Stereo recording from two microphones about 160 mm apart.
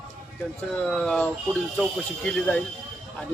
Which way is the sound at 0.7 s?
5° left (ahead or behind).